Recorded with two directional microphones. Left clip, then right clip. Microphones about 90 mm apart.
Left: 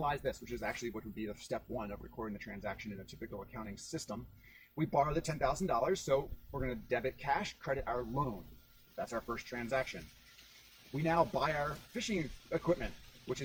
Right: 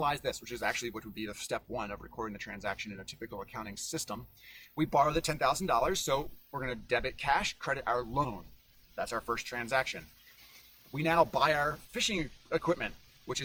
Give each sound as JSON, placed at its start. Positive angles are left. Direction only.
{"t": 0.0, "sound": "speech", "side_deg": -25}
{"t": 11.0, "sound": "speech", "side_deg": -25}